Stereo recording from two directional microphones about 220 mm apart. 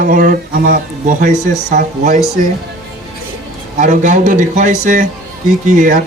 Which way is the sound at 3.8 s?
35° right (ahead or behind).